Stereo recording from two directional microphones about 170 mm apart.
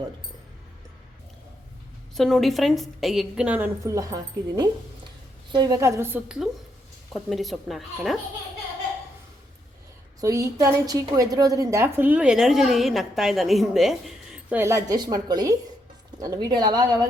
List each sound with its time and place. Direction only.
2.1 s a woman's voice: centre (ahead or behind)
10.2 s a woman's voice: 20° right (ahead or behind); by 14.3 s centre (ahead or behind)
14.5 s a woman's voice: 15° right (ahead or behind)